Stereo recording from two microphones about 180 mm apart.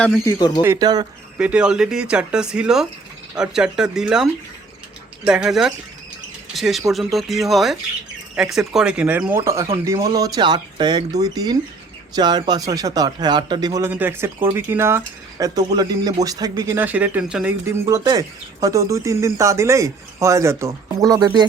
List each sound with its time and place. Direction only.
0.3 s speech: 20° left (ahead or behind)
0.6 s speech: 20° right (ahead or behind)
1.4 s speech: 5° right (ahead or behind)
17.7 s speech: 20° right (ahead or behind)